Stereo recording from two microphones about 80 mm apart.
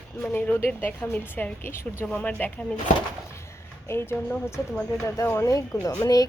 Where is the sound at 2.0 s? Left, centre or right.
Centre.